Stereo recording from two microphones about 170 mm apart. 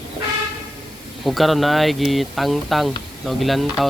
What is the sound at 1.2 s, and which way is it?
Speech, centre (ahead or behind).